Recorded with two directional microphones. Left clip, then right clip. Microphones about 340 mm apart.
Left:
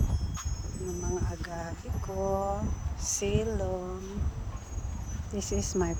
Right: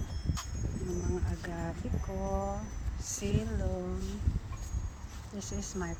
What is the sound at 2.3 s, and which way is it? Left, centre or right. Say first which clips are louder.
Speech: left 6 dB; left.